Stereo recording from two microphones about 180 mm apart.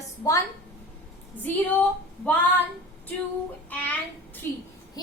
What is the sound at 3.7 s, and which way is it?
Speech, 10° left (ahead or behind).